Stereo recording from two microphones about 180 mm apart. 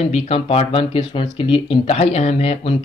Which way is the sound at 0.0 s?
35° left (ahead or behind).